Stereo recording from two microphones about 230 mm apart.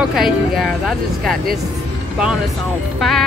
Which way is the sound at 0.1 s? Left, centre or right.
Centre.